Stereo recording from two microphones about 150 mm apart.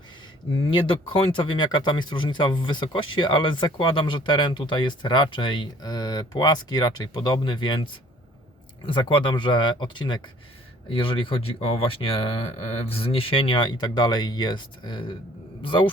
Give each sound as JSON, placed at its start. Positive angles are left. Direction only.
{"t": 0.7, "sound": "speech", "side_deg": 35}
{"t": 8.9, "sound": "speech", "side_deg": 35}